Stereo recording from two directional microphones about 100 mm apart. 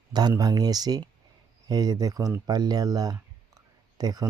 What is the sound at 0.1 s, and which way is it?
Speech, 45° right (ahead or behind).